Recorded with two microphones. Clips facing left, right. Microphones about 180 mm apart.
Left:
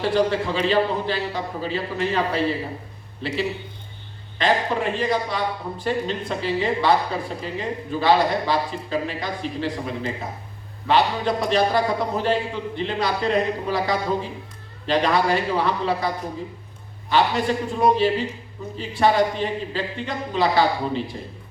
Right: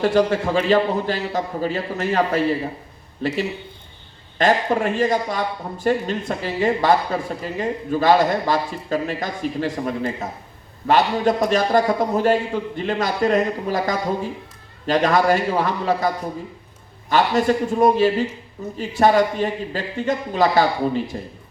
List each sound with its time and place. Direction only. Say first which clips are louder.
0.0 s a man's voice: right 3 dB; 45° right (ahead or behind)
17.1 s a man's voice: right 3 dB; 45° right (ahead or behind)